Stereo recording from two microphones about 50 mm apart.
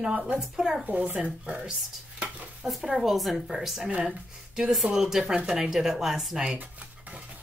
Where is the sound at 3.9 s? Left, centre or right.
Right.